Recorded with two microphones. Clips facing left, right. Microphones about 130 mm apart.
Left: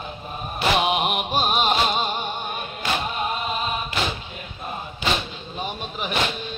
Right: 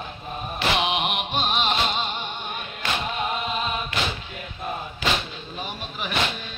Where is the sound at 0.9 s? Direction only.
45° left (ahead or behind).